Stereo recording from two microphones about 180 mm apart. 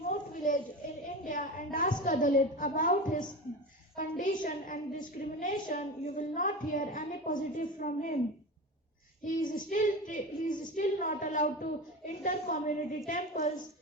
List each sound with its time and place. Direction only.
0.1 s a sound: 45° left (ahead or behind)
3.9 s a woman's voice: 45° left (ahead or behind)
9.2 s a woman's voice: 45° left (ahead or behind)